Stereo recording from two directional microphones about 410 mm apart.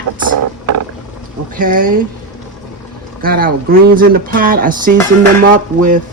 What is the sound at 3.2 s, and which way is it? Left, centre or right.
Speech, right.